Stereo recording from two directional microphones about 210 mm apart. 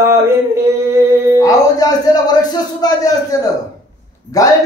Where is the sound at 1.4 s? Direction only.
15° left (ahead or behind).